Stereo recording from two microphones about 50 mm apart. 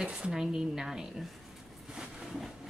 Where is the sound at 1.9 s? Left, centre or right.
Centre.